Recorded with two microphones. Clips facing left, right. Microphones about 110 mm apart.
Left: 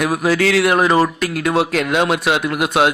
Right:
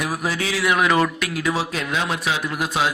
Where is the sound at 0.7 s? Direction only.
30° left (ahead or behind).